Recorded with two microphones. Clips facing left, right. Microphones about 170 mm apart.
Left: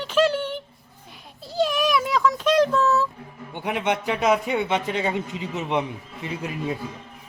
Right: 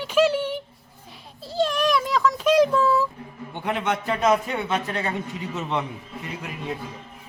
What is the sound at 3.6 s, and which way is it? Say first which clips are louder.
Speech: left 1 dB; 15° left (ahead or behind).